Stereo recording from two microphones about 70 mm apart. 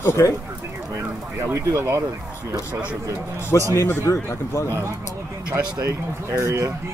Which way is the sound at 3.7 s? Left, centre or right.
Left.